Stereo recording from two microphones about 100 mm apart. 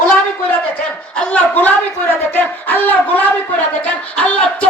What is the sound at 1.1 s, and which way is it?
Speech, 10° left (ahead or behind).